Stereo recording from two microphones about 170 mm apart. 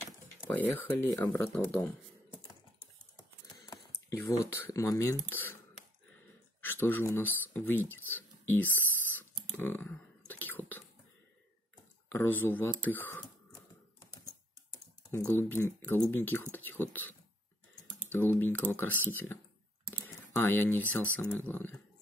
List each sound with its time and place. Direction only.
0.5 s speech: 10° left (ahead or behind)
1.5 s speech: centre (ahead or behind)
4.1 s speech: 20° left (ahead or behind)
6.6 s a sound: 10° left (ahead or behind)
12.1 s speech: 10° left (ahead or behind)
12.8 s a sound: 10° left (ahead or behind)
15.3 s speech: 15° left (ahead or behind)
18.1 s speech: 10° left (ahead or behind)
19.9 s typing: 10° left (ahead or behind)
21.1 s speech: 10° left (ahead or behind)